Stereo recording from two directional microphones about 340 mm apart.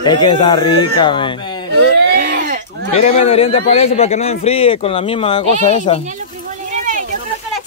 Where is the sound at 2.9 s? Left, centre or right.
Centre.